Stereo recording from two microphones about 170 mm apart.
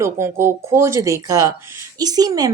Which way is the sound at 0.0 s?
15° right (ahead or behind).